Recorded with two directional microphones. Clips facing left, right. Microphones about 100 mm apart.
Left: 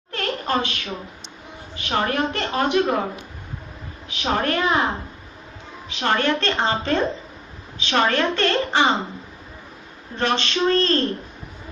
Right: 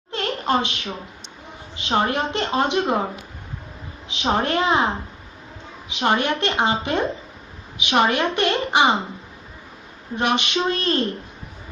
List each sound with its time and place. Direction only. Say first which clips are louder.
0.1 s a sound: right 2 dB; 20° right (ahead or behind)
1.8 s a woman's voice: right 1 dB; 20° right (ahead or behind)
4.1 s a woman's voice: right 1 dB; 20° right (ahead or behind)
5.9 s a woman's voice: even; 15° right (ahead or behind)
10.1 s a woman's voice: right 1 dB; 15° right (ahead or behind)